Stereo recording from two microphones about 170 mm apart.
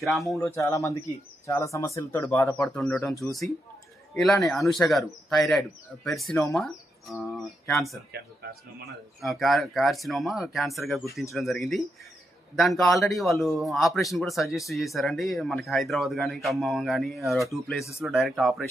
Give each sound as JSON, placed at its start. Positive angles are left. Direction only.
{"t": 0.0, "sound": "speech", "side_deg": 0}
{"t": 0.3, "sound": "speech", "side_deg": 15}
{"t": 2.7, "sound": "speech", "side_deg": 5}
{"t": 8.1, "sound": "speech", "side_deg": -75}
{"t": 8.9, "sound": "speech", "side_deg": 0}